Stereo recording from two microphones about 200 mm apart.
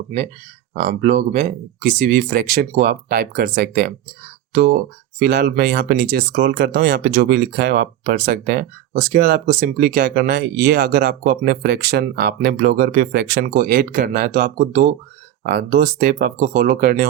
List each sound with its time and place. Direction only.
0.7 s speech: 45° right (ahead or behind)